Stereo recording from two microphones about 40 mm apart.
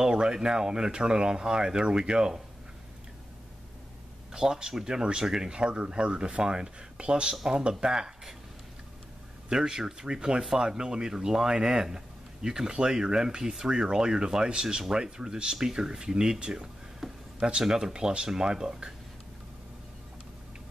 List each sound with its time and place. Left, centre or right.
0.0 s speech: centre
4.3 s speech: centre
5.6 s speech: right
9.5 s speech: centre
17.0 s a sound: centre
17.4 s speech: centre